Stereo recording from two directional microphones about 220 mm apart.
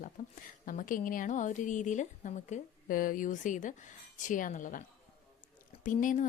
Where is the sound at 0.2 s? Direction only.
35° left (ahead or behind).